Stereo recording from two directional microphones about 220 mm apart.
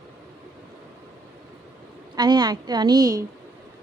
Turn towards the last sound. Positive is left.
turn(degrees=-15)  # may be behind; listen again after turning